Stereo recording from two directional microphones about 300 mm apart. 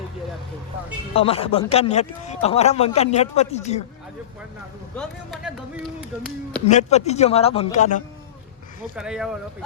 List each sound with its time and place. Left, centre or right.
1.1 s speech: centre
4.9 s speech: centre
6.7 s speech: left
9.0 s speech: centre